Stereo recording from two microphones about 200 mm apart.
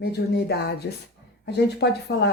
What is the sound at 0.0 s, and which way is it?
Speech, 55° left (ahead or behind).